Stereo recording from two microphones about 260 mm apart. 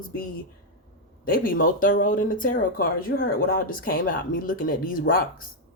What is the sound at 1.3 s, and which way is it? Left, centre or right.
Speech, left.